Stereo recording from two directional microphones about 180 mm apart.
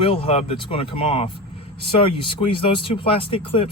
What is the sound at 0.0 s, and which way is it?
Speech, 30° left (ahead or behind).